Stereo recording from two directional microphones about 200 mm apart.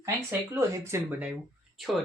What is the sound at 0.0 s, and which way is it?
Speech, 15° right (ahead or behind).